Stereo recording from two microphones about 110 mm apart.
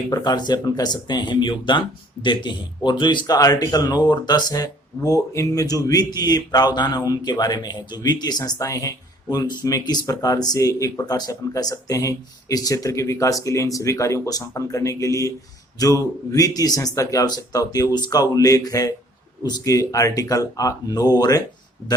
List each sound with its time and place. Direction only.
0.1 s speech: 40° left (ahead or behind)